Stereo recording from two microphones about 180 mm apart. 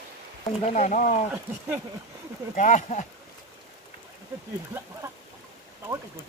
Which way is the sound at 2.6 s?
45° left (ahead or behind).